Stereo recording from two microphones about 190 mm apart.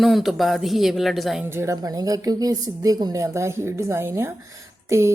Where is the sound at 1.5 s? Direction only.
15° right (ahead or behind).